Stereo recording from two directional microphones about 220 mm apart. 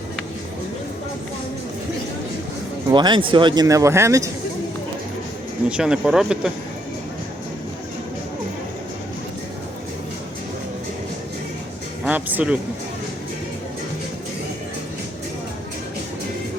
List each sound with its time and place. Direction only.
2.9 s speech: 20° right (ahead or behind)
5.6 s speech: 5° right (ahead or behind)
12.0 s speech: 5° right (ahead or behind)